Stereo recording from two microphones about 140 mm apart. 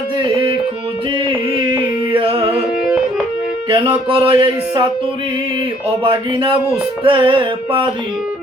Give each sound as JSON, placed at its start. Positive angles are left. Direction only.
{"t": 2.1, "sound": "music", "side_deg": -30}
{"t": 3.7, "sound": "music", "side_deg": -35}
{"t": 6.0, "sound": "music", "side_deg": -40}